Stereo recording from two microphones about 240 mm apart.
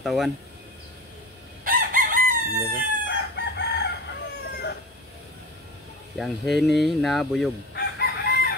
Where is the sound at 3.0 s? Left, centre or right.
Left.